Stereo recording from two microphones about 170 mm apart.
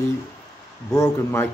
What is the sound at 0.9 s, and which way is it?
Speech, 15° left (ahead or behind).